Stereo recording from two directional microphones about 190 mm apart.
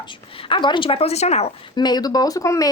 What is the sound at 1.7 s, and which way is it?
Speech, 20° left (ahead or behind).